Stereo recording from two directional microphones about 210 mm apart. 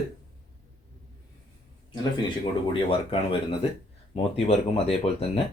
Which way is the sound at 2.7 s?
25° left (ahead or behind).